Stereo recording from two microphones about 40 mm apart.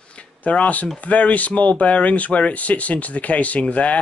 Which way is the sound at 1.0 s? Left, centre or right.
Left.